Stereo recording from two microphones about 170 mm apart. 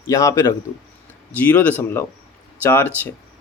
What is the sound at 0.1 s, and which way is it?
A man's voice, 20° left (ahead or behind).